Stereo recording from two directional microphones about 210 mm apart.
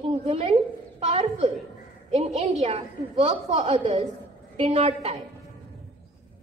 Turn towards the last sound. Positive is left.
turn(degrees=-30)  # may be behind; listen again after turning